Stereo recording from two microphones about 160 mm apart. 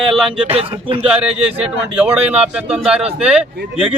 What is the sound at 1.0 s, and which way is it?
A man's voice, 5° right (ahead or behind).